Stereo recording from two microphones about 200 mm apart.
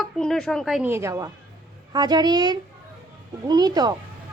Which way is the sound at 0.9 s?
15° right (ahead or behind).